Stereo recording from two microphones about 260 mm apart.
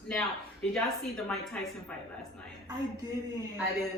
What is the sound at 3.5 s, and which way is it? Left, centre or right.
Speech, centre.